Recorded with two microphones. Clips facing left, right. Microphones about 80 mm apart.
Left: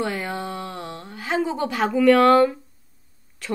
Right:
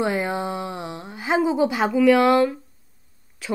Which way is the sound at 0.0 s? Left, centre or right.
Centre.